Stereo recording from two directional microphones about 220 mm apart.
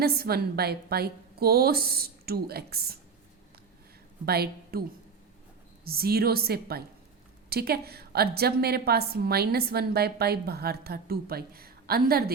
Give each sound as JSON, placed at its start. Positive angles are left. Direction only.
{"t": 0.0, "sound": "a woman's voice", "side_deg": -45}
{"t": 4.3, "sound": "a woman's voice", "side_deg": -45}
{"t": 5.8, "sound": "a woman's voice", "side_deg": -45}